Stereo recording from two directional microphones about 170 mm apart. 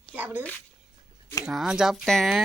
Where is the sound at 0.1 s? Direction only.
10° right (ahead or behind).